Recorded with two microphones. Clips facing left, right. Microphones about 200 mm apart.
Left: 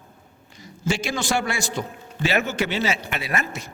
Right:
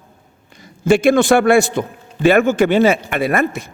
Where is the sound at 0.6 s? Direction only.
55° right (ahead or behind).